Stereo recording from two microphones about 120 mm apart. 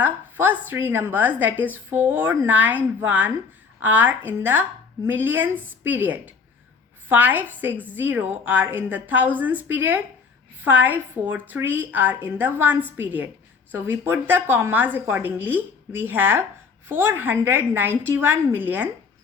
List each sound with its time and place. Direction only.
0.0 s a woman's voice: 15° right (ahead or behind)